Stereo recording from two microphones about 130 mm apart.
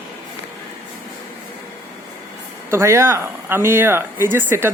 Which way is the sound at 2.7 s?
20° right (ahead or behind).